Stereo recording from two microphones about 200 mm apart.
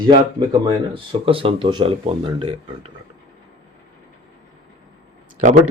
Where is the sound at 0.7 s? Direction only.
25° right (ahead or behind).